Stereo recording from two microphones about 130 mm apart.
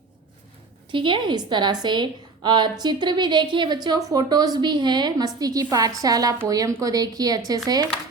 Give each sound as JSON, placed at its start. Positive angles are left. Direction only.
{"t": 0.9, "sound": "a woman's voice", "side_deg": -40}